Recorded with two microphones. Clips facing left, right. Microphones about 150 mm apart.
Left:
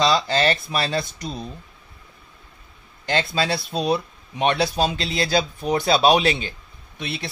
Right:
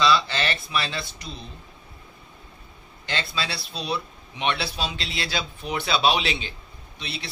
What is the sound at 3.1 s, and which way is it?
Speech, 45° left (ahead or behind).